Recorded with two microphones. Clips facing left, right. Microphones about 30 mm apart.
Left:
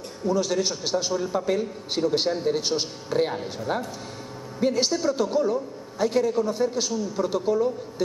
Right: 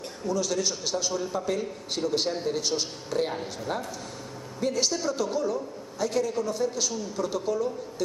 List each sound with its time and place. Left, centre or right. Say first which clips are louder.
0.3 s a man's voice: left 4 dB; left